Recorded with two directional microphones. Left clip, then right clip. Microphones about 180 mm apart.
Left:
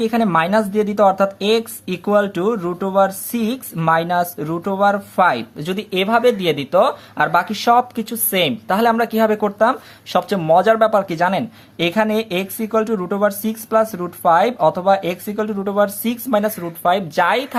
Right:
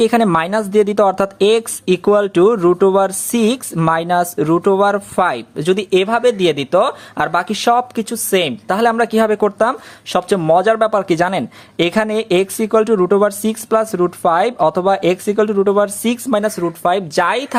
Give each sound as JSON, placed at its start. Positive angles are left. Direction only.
{"t": 0.0, "sound": "speech", "side_deg": -35}